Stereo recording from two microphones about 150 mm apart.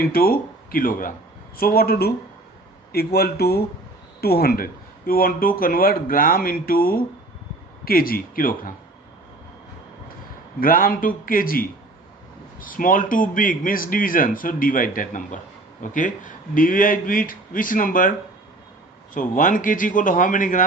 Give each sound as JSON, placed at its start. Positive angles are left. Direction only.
{"t": 0.0, "sound": "speech", "side_deg": 80}
{"t": 1.5, "sound": "speech", "side_deg": 85}
{"t": 10.6, "sound": "speech", "side_deg": 70}
{"t": 19.1, "sound": "speech", "side_deg": 60}